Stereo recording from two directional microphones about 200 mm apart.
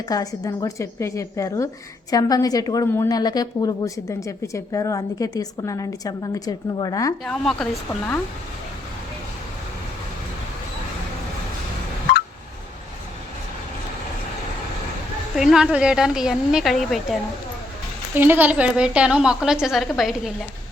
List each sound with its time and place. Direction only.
0.1 s a woman's voice: 15° left (ahead or behind)
7.3 s a woman's voice: 5° left (ahead or behind)
12.1 s a sound: 55° left (ahead or behind)
15.4 s a woman's voice: centre (ahead or behind)
18.1 s a woman's voice: 10° right (ahead or behind)